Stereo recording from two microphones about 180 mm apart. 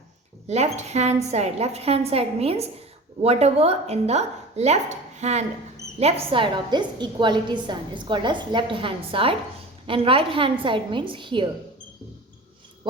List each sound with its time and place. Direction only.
0.4 s a woman's voice: 40° right (ahead or behind)